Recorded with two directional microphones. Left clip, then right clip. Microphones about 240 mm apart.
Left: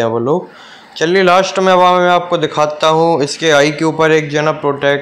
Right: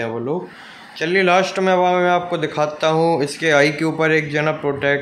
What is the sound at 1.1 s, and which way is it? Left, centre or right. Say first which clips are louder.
A man's voice: left 5 dB; centre.